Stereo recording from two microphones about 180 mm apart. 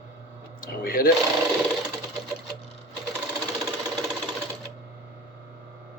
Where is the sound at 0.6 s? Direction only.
55° left (ahead or behind).